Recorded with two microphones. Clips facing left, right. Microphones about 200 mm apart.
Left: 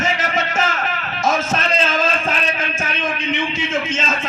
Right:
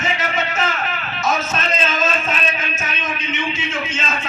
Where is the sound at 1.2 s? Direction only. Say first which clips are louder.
Left 2 dB; 50° left (ahead or behind).